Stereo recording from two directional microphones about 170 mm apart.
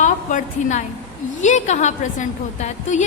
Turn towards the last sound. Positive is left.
turn(degrees=45)  # may be behind; listen again after turning